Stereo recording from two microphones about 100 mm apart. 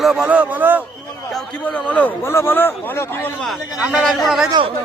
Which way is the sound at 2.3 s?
25° left (ahead or behind).